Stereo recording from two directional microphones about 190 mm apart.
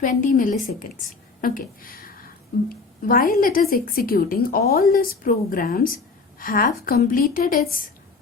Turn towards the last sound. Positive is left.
turn(degrees=50)  # may be behind; listen again after turning